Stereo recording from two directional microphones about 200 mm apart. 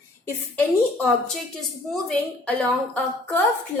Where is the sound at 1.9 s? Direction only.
5° left (ahead or behind).